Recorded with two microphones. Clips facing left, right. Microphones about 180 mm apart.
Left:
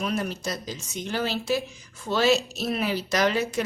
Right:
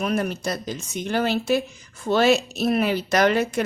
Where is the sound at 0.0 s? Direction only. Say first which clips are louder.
Right 4 dB; 55° right (ahead or behind).